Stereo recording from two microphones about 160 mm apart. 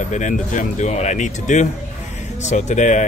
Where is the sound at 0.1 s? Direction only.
50° left (ahead or behind).